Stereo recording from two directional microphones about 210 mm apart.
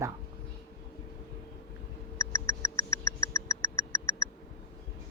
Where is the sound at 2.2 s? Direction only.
15° left (ahead or behind).